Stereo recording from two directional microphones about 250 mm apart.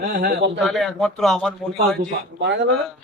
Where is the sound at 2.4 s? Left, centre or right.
Right.